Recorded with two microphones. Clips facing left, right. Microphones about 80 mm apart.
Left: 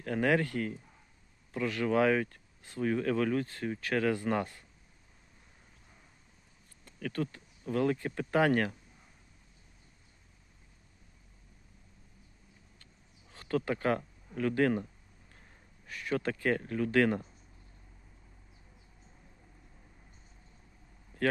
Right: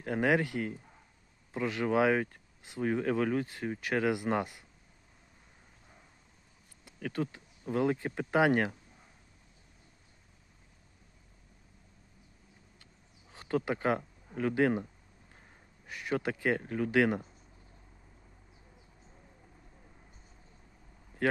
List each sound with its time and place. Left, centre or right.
0.0 s speech: centre
6.8 s speech: centre
13.3 s speech: centre
15.9 s speech: centre
21.2 s speech: centre